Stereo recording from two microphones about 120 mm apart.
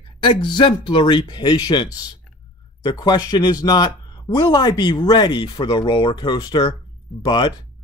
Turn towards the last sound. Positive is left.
turn(degrees=35)  # may be behind; listen again after turning